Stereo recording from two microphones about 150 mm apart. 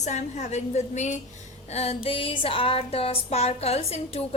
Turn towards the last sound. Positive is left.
turn(degrees=45)  # may be behind; listen again after turning